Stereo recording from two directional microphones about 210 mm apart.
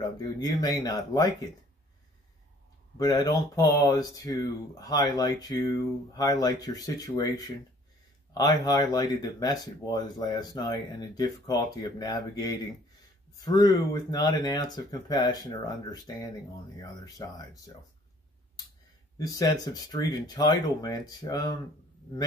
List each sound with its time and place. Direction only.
0.2 s speech: 20° left (ahead or behind)
3.0 s speech: 15° left (ahead or behind)
19.1 s speech: 15° left (ahead or behind)